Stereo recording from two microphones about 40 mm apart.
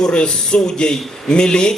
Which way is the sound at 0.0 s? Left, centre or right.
Left.